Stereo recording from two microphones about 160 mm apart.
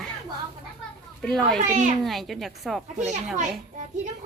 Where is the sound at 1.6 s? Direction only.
50° right (ahead or behind).